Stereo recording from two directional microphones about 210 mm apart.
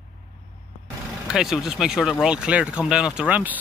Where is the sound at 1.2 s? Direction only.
5° right (ahead or behind).